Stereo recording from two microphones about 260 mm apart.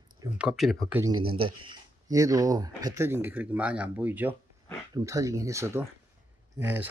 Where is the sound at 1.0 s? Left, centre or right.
Centre.